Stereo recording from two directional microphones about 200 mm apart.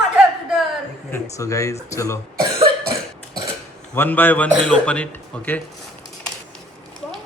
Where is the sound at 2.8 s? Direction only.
50° right (ahead or behind).